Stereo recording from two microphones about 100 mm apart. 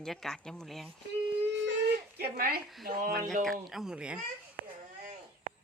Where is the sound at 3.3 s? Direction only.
5° left (ahead or behind).